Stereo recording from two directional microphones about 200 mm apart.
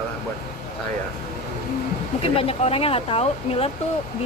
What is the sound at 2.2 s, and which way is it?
Speech, 30° left (ahead or behind).